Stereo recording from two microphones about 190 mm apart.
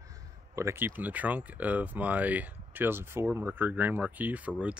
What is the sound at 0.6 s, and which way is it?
Speech, 15° right (ahead or behind).